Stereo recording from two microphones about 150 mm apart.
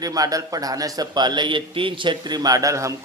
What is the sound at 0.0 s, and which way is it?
A man's voice, 25° right (ahead or behind).